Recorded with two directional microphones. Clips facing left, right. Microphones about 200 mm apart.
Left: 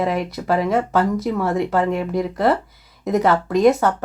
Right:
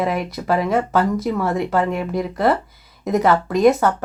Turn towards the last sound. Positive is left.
turn(degrees=30)  # may be behind; listen again after turning